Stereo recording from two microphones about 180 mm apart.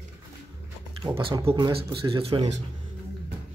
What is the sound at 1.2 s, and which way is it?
Speech, 30° right (ahead or behind).